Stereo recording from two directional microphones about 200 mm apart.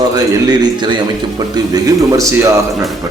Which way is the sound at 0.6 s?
20° right (ahead or behind).